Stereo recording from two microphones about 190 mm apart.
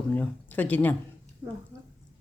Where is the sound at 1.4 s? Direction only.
25° right (ahead or behind).